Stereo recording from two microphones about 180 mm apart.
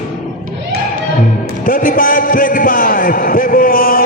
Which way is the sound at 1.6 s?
50° left (ahead or behind).